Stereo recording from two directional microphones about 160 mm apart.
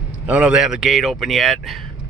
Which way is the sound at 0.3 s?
5° right (ahead or behind).